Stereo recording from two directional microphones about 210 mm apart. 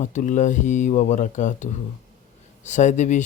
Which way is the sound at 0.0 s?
35° left (ahead or behind).